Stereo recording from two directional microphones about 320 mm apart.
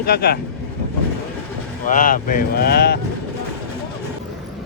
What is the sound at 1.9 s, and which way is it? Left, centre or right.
Speech, left.